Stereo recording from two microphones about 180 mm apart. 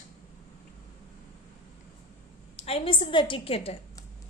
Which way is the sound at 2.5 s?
35° left (ahead or behind).